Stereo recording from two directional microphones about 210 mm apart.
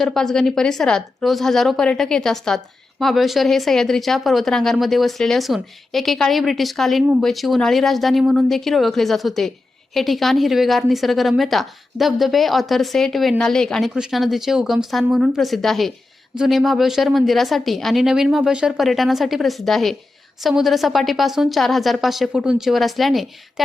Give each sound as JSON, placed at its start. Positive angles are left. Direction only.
{"t": 0.0, "sound": "speech", "side_deg": 0}